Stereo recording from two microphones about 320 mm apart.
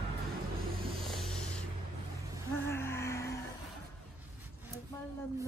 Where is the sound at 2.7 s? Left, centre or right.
Centre.